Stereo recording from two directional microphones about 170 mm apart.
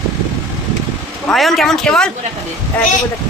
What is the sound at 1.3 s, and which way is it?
Speech, centre (ahead or behind).